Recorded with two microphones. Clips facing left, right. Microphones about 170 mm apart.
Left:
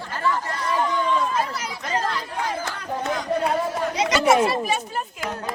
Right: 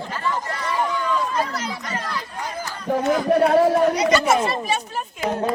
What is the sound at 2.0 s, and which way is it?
Chatter, 90° left.